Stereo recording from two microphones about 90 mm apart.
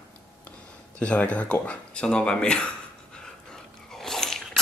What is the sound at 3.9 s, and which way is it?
Biting, 5° left (ahead or behind).